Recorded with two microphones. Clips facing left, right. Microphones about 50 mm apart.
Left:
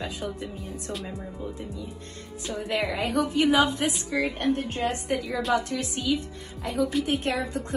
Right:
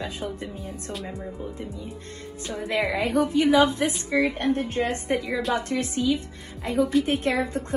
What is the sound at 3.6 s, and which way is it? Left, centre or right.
Speech, right.